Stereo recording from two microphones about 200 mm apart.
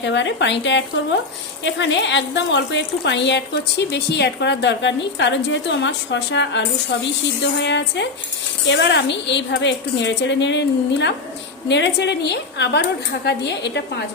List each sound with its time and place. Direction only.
0.0 s a woman's voice: 65° left (ahead or behind)
7.6 s a woman's voice: 60° left (ahead or behind)